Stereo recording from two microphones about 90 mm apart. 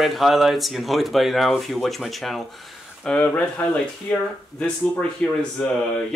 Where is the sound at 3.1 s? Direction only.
20° left (ahead or behind).